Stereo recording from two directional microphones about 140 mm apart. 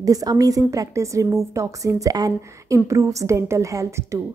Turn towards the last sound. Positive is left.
turn(degrees=-20)  # may be behind; listen again after turning